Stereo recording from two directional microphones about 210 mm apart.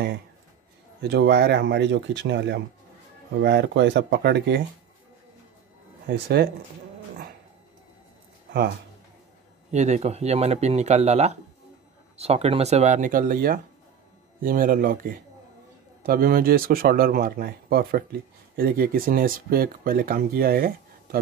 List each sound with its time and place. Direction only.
1.0 s speech: 50° right (ahead or behind)
6.0 s speech: 45° right (ahead or behind)
9.7 s speech: 35° right (ahead or behind)